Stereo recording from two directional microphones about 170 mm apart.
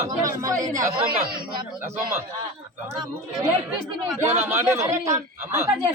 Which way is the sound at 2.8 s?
15° right (ahead or behind).